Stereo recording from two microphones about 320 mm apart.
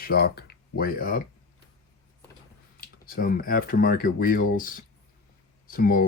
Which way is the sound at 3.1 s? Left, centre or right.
Left.